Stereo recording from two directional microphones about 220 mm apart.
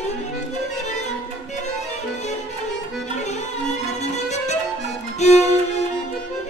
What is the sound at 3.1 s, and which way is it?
Violin, 30° left (ahead or behind).